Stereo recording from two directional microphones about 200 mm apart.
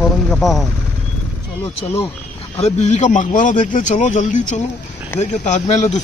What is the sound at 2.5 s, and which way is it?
Speech, 35° left (ahead or behind).